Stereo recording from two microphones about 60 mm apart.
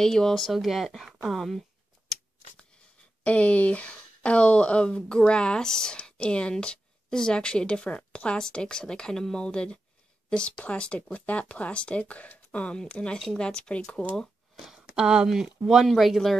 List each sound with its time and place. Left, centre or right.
0.0 s speech: centre
2.1 s scissors: centre
3.3 s speech: left
14.6 s a sound: centre
15.2 s speech: centre